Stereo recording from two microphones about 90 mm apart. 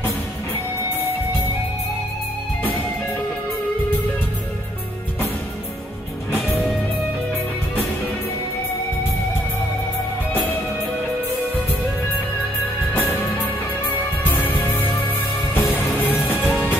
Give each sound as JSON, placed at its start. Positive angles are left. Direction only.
{"t": 14.2, "sound": "music", "side_deg": 20}